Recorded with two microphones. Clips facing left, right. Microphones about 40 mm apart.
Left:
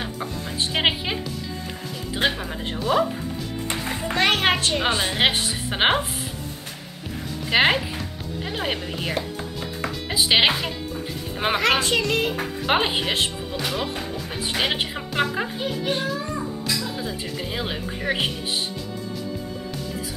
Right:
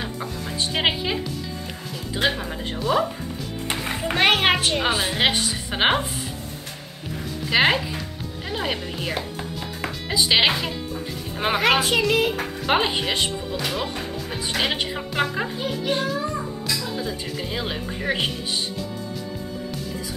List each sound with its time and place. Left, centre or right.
0.7 s speech: centre
2.8 s a child's voice: centre
3.6 s music: centre
4.3 s a child's voice: centre
7.5 s a child's voice: centre
11.6 s a child's voice: centre
12.6 s a child's voice: centre